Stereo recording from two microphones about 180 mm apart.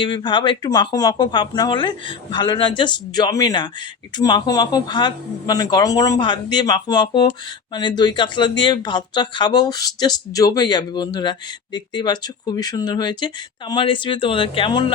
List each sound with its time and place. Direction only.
0.0 s speech: 25° left (ahead or behind)